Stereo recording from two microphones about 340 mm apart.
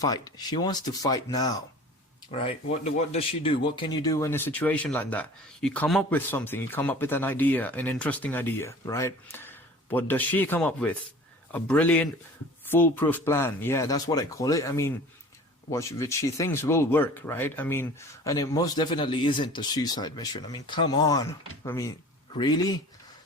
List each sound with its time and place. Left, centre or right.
0.0 s speech: centre